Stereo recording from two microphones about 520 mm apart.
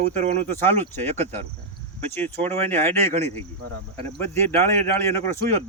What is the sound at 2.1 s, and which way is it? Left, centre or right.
Cricket, centre.